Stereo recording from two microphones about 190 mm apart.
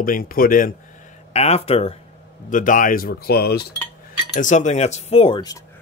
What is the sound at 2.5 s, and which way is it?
Speech, 45° left (ahead or behind).